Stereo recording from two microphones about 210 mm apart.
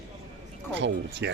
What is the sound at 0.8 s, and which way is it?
Speech, 55° right (ahead or behind).